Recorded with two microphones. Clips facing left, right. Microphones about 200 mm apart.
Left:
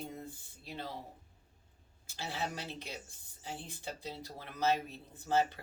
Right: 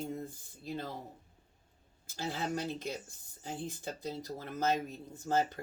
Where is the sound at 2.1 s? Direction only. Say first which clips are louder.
Right 4 dB; 50° right (ahead or behind).